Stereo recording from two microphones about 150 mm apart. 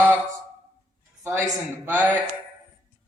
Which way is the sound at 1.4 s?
15° right (ahead or behind).